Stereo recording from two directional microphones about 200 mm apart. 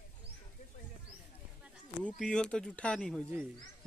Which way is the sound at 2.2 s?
5° left (ahead or behind).